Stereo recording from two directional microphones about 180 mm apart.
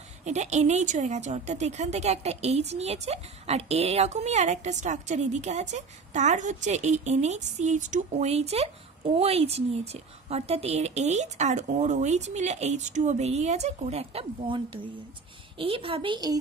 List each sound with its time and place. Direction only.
0.2 s a woman's voice: 40° right (ahead or behind); by 16.3 s 25° right (ahead or behind)